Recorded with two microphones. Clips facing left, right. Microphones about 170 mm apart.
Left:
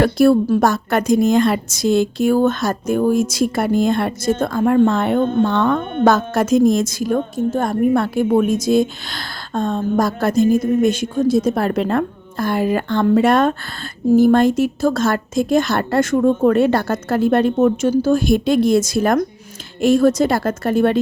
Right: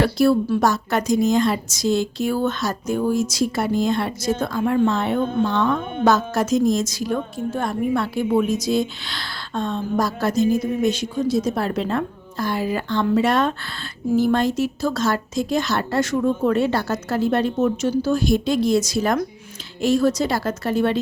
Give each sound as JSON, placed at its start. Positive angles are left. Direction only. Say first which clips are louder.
{"t": 0.0, "sound": "a woman's voice", "louder": "left 4 dB", "side_deg": 50}